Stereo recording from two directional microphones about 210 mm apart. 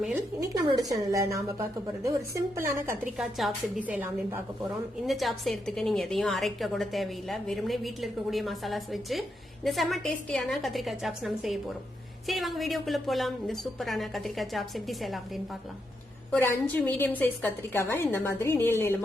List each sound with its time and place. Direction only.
0.3 s speech: 15° right (ahead or behind)
3.2 s a woman's voice: centre (ahead or behind)
16.3 s a woman's voice: 10° left (ahead or behind)